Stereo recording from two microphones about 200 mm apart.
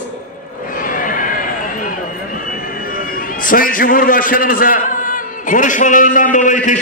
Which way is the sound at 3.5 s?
45° left (ahead or behind).